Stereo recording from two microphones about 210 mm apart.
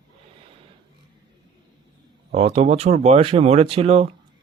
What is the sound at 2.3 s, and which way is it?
Speech, 30° right (ahead or behind).